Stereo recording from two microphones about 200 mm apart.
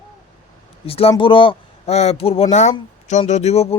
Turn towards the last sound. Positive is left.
turn(degrees=30)  # may be behind; listen again after turning